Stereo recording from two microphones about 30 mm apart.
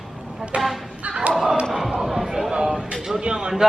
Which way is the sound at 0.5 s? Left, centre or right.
Right.